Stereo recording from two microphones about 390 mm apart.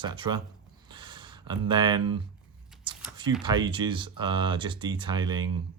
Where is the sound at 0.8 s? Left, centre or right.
Centre.